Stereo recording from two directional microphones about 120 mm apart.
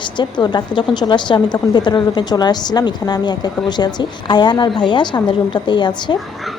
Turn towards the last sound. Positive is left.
turn(degrees=40)  # may be behind; listen again after turning